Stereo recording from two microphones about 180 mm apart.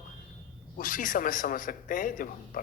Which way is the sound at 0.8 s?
50° left (ahead or behind).